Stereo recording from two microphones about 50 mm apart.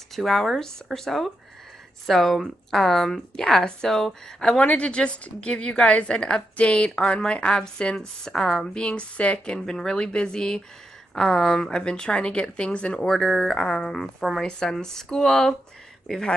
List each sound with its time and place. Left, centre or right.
0.1 s a woman's voice: centre; by 13.0 s left
13.0 s speech: centre